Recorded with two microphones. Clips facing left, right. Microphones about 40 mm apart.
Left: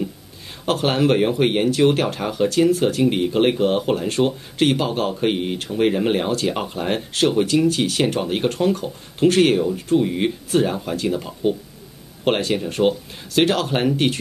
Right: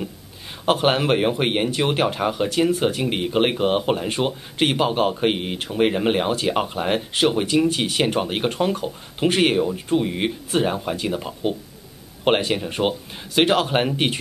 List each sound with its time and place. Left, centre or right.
0.7 s speech: centre